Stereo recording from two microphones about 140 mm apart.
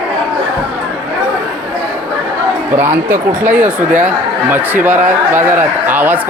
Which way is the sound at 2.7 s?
15° right (ahead or behind).